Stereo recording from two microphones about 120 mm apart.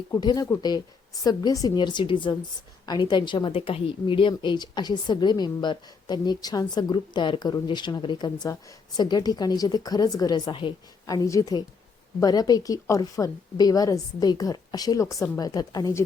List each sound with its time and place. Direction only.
0.1 s a woman's voice: 30° left (ahead or behind)
11.0 s a woman's voice: 30° left (ahead or behind)